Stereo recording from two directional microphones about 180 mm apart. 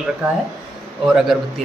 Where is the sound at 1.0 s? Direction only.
5° right (ahead or behind).